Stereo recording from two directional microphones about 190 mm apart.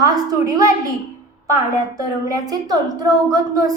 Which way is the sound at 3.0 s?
20° right (ahead or behind).